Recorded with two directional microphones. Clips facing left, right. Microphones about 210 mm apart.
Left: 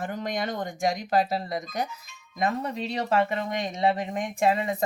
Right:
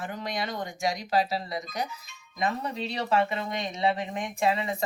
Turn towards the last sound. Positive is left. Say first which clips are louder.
# left 3 dB
turn(degrees=45)  # may be behind; listen again after turning